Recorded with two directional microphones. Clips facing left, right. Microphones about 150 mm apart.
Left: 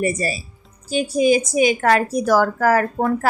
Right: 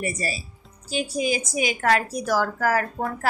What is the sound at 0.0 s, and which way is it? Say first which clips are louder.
Speech: left 7 dB; 50° left (ahead or behind).